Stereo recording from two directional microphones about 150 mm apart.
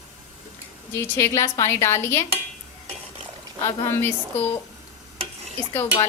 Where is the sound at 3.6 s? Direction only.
20° left (ahead or behind).